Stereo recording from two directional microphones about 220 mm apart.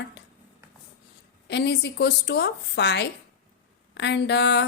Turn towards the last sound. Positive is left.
turn(degrees=50)  # may be behind; listen again after turning